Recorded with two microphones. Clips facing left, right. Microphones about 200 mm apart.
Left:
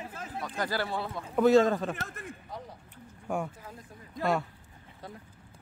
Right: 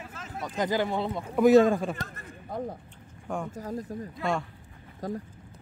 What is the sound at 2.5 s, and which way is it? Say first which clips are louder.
Speech: right 9 dB; 50° right (ahead or behind).